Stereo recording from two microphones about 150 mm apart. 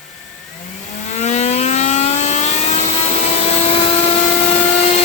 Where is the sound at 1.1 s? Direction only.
50° left (ahead or behind).